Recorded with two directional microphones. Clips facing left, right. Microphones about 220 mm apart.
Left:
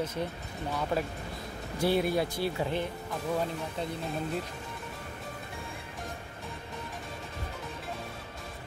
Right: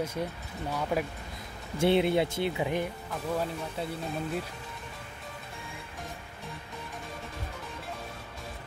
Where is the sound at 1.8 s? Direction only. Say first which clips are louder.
Right 3 dB; 25° right (ahead or behind).